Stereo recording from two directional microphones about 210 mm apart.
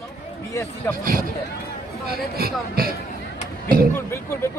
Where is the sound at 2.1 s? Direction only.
45° right (ahead or behind).